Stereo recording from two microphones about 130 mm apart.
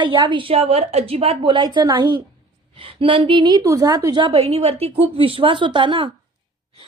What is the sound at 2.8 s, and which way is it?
A woman's voice, 45° right (ahead or behind).